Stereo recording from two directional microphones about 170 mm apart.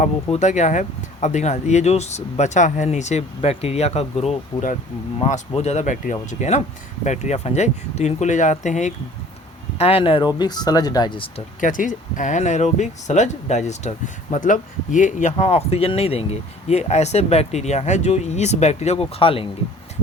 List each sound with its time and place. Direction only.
0.0 s speech: 45° left (ahead or behind)
11.6 s speech: 50° left (ahead or behind); by 19.5 s 35° left (ahead or behind)